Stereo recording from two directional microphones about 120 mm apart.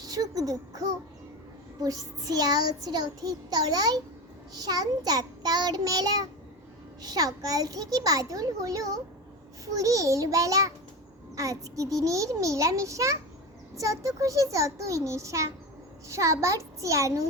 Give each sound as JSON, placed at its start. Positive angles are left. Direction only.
{"t": 0.0, "sound": "a child's voice", "side_deg": -30}
{"t": 1.8, "sound": "child singing", "side_deg": -30}
{"t": 9.7, "sound": "a child's voice", "side_deg": -30}